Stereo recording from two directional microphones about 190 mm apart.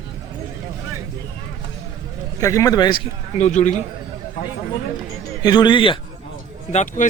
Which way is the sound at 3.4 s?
40° left (ahead or behind).